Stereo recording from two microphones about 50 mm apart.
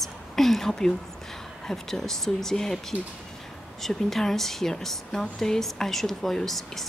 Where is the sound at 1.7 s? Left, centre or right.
Centre.